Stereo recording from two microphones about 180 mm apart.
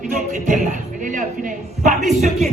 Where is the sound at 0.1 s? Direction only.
45° right (ahead or behind).